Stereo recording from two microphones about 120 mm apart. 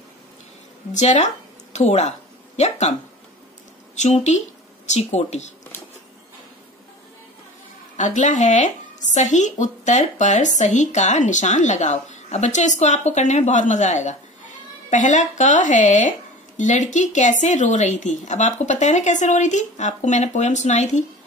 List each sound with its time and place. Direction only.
0.9 s speech: 75° left (ahead or behind)
8.0 s speech: 90° left